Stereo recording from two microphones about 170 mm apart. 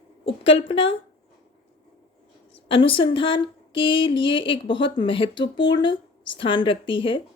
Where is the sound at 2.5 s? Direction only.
30° left (ahead or behind).